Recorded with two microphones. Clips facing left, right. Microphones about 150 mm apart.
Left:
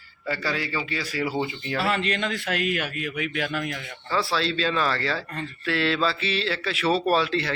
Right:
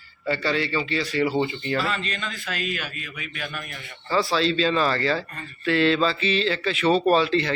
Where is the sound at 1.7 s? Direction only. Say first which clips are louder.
Left 4 dB; 65° left (ahead or behind).